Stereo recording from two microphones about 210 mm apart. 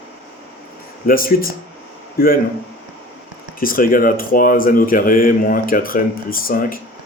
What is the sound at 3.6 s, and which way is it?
Speech, 40° left (ahead or behind).